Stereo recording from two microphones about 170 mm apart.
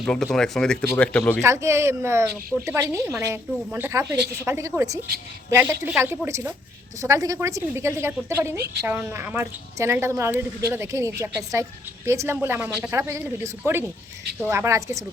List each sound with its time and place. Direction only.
0.0 s speech: 5° left (ahead or behind)
1.4 s speech: 15° right (ahead or behind)